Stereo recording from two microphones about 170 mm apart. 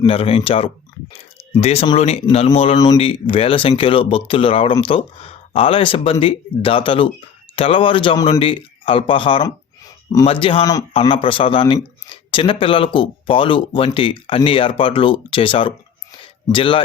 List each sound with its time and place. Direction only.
0.0 s speech: 35° left (ahead or behind)
2.7 s speech: 25° left (ahead or behind)
16.2 s a sound: 30° left (ahead or behind)